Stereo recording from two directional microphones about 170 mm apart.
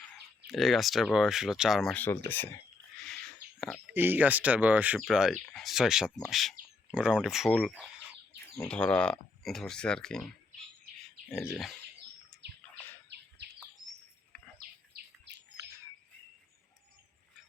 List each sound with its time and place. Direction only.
0.5 s speech: centre (ahead or behind)
3.9 s speech: 10° right (ahead or behind)
12.3 s bird: centre (ahead or behind)
13.1 s bird: 80° right
14.9 s bird: 80° right